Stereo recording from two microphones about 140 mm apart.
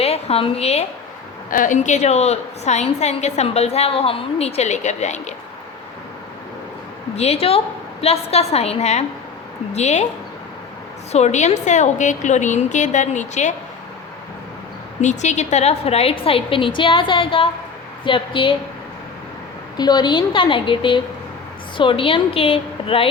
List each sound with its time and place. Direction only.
0.0 s a woman's voice: 45° left (ahead or behind)
1.5 s a woman's voice: 70° left (ahead or behind); by 5.3 s 55° left (ahead or behind)
7.2 s a woman's voice: 45° left (ahead or behind)
11.1 s a woman's voice: 55° left (ahead or behind)
15.0 s a woman's voice: 55° left (ahead or behind); by 18.5 s 35° left (ahead or behind)
19.7 s a woman's voice: 30° left (ahead or behind)